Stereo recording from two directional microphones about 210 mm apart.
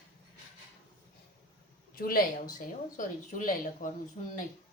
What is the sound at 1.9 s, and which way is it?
Speech, 40° left (ahead or behind).